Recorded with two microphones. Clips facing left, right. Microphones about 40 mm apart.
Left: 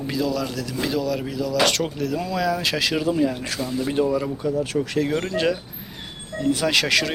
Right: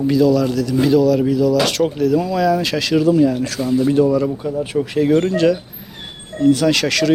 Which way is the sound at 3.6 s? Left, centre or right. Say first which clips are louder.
Right 8 dB; centre.